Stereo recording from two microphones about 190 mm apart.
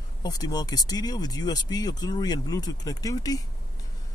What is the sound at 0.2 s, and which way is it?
Speech, 20° left (ahead or behind).